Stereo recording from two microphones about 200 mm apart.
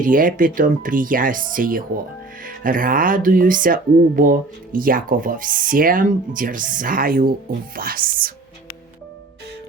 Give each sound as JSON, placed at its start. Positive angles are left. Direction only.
{"t": 0.0, "sound": "speech", "side_deg": -45}